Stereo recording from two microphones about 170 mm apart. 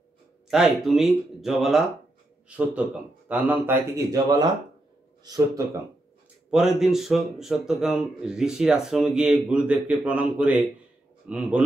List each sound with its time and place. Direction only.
0.5 s speech: 5° right (ahead or behind); by 5.4 s 25° right (ahead or behind)
6.5 s speech: 5° right (ahead or behind)